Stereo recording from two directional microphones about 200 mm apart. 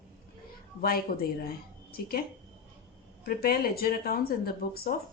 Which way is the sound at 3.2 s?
50° left (ahead or behind).